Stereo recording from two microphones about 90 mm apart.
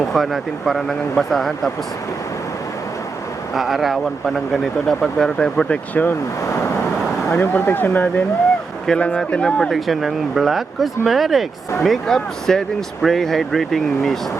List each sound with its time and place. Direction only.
0.1 s speech: centre (ahead or behind)
3.5 s speech: centre (ahead or behind); by 6.1 s 20° left (ahead or behind)
7.3 s speech: 25° left (ahead or behind); by 14.2 s centre (ahead or behind)